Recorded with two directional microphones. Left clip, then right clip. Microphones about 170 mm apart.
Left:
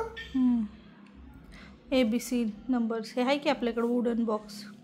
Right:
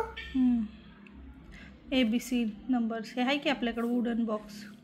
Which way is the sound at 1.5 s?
30° left (ahead or behind).